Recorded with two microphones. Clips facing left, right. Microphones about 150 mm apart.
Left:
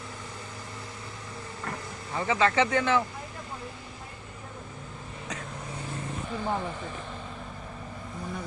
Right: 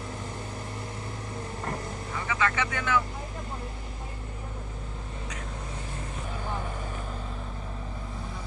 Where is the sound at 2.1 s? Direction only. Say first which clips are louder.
Left 5 dB; 25° left (ahead or behind).